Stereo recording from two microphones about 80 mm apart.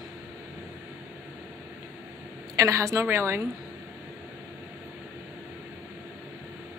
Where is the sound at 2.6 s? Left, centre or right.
Right.